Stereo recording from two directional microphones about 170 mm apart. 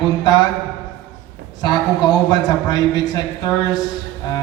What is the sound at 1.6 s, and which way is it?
A man's voice, 25° left (ahead or behind).